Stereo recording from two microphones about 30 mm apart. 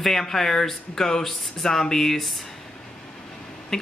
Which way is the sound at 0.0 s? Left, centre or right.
Centre.